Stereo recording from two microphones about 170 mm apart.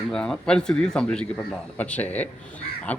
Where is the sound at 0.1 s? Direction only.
5° left (ahead or behind).